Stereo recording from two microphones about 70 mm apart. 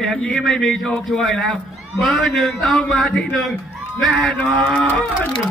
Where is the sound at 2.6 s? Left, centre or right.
Centre.